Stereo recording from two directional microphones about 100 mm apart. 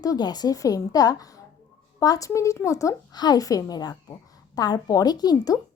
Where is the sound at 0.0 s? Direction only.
40° left (ahead or behind).